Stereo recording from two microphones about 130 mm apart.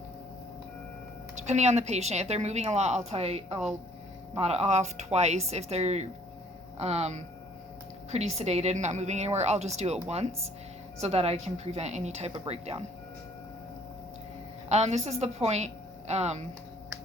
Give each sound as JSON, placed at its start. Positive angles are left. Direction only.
{"t": 1.4, "sound": "a woman's voice", "side_deg": -60}
{"t": 14.7, "sound": "a woman's voice", "side_deg": -60}